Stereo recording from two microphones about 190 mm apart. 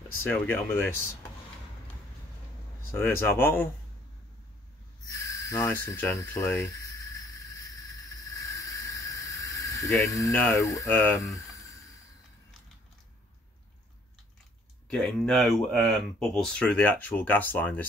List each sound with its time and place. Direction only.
0.2 s speech: 10° left (ahead or behind)
2.9 s speech: 10° left (ahead or behind)
5.3 s a sound: 15° left (ahead or behind)
10.0 s speech: 20° left (ahead or behind)
14.9 s speech: 5° left (ahead or behind)